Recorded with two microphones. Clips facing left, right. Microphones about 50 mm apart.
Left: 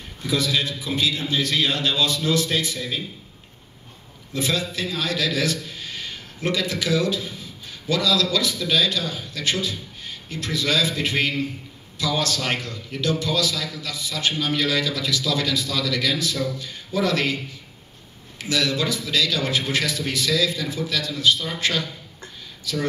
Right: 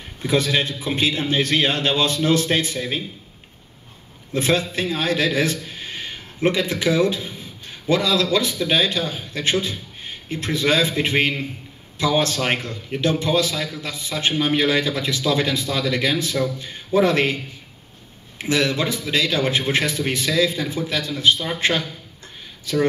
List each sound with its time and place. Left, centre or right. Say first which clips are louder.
0.2 s a man's voice: right 3 dB; right
4.3 s a man's voice: right 4 dB; right
18.4 s a man's voice: right 3 dB; right